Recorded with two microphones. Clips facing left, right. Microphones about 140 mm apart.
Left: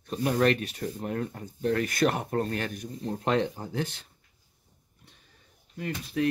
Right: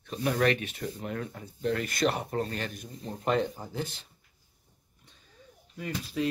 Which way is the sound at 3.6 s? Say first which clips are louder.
Left 3 dB; 65° left (ahead or behind).